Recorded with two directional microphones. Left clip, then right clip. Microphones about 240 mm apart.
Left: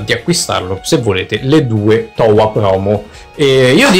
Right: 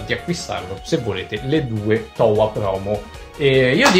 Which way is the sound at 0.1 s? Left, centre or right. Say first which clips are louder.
Left 10 dB; left.